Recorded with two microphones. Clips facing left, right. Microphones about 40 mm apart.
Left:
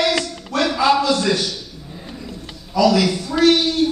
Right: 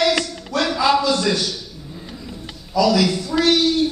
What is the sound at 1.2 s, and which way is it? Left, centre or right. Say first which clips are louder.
Speech: left 1 dB; centre.